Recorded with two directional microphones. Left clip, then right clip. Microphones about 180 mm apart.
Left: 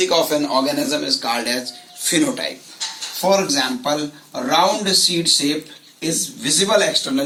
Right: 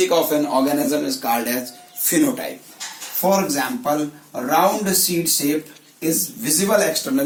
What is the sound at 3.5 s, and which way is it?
A man's voice, 10° right (ahead or behind).